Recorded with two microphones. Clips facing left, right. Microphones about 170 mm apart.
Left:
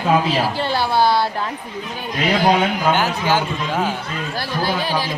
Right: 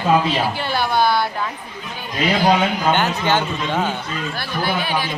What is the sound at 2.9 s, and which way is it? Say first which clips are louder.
A man's voice: even; 5° left (ahead or behind).